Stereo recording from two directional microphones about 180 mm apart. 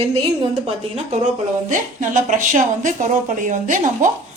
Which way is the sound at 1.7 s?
45° right (ahead or behind).